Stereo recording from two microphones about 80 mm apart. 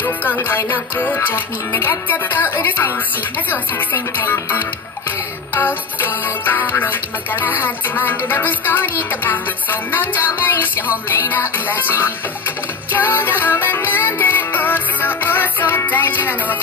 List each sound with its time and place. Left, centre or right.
0.0 s music: left